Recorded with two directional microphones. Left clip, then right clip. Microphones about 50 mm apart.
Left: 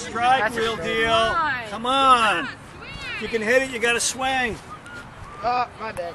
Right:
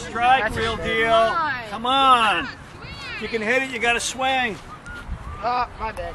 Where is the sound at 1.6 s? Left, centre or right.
Right.